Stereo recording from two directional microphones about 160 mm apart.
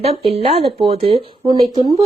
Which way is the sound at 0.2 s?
35° right (ahead or behind).